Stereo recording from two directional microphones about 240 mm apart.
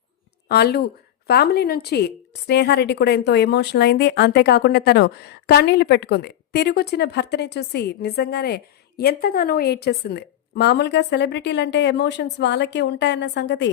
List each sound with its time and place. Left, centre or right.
0.4 s a woman's voice: left